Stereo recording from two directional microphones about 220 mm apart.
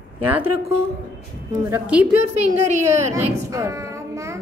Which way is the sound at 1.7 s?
5° right (ahead or behind).